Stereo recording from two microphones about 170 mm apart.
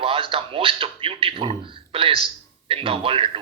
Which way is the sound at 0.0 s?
30° right (ahead or behind).